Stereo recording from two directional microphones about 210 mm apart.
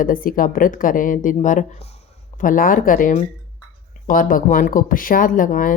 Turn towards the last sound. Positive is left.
turn(degrees=40)  # may be behind; listen again after turning